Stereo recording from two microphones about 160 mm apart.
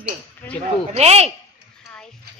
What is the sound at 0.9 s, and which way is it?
Speech, 40° right (ahead or behind).